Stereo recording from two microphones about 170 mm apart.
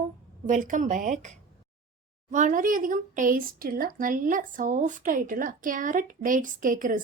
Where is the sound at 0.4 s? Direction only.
50° right (ahead or behind).